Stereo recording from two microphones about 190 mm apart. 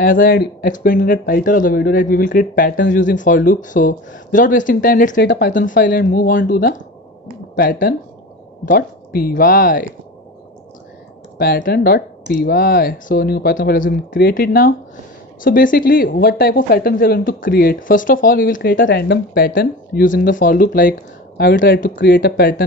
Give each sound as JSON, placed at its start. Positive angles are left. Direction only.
{"t": 0.0, "sound": "speech", "side_deg": 50}
{"t": 5.1, "sound": "speech", "side_deg": 65}
{"t": 5.5, "sound": "speech", "side_deg": 45}
{"t": 11.3, "sound": "speech", "side_deg": 50}
{"t": 18.8, "sound": "speech", "side_deg": 70}
{"t": 21.4, "sound": "speech", "side_deg": 65}
{"t": 21.9, "sound": "speech", "side_deg": 60}